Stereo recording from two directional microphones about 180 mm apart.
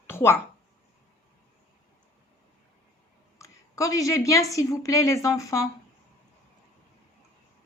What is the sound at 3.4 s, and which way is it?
A woman's voice, 15° left (ahead or behind).